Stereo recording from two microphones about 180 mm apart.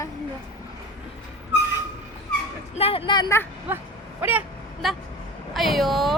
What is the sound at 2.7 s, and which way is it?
Speech, 30° left (ahead or behind).